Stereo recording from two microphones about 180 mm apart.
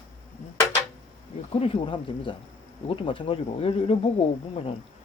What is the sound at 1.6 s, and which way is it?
Speech, 30° left (ahead or behind).